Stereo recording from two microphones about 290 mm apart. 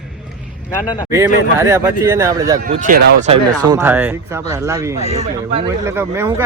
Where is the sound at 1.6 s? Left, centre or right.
Centre.